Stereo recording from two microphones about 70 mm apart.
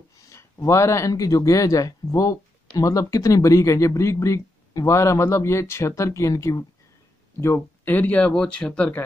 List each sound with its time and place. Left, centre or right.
0.3 s speech: left
7.3 s speech: left; by 8.9 s centre